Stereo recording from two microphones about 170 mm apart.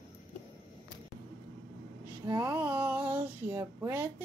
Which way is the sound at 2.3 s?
20° right (ahead or behind).